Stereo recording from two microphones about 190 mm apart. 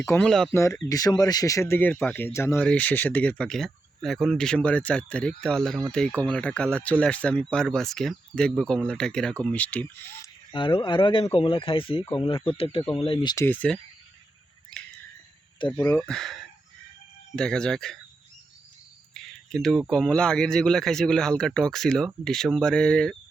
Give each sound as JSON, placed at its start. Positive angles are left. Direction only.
{"t": 0.0, "sound": "speech", "side_deg": 15}
{"t": 0.3, "sound": "speech", "side_deg": 0}
{"t": 0.5, "sound": "speech", "side_deg": 15}
{"t": 10.5, "sound": "speech", "side_deg": 25}
{"t": 13.3, "sound": "speech", "side_deg": 10}
{"t": 16.0, "sound": "speech", "side_deg": 5}
{"t": 19.1, "sound": "a sound", "side_deg": 5}
{"t": 19.9, "sound": "speech", "side_deg": 5}